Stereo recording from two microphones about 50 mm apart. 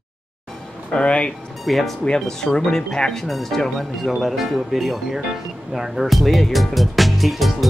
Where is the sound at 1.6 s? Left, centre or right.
Centre.